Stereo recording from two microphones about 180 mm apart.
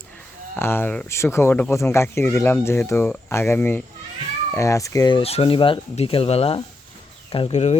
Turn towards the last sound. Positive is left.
turn(degrees=40)  # may be behind; listen again after turning